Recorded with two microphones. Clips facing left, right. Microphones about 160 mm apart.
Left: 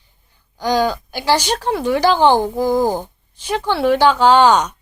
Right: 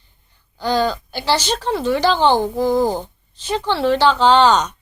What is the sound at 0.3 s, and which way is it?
A woman's voice, 10° left (ahead or behind).